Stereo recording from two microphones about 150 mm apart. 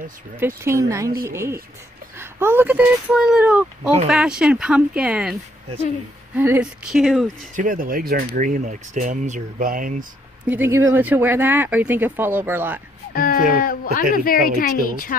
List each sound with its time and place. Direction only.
0.4 s speech: 20° right (ahead or behind); by 7.2 s centre (ahead or behind)
7.5 s speech: 65° right (ahead or behind)
10.4 s speech: 15° right (ahead or behind)
13.1 s a woman's voice: 70° left (ahead or behind)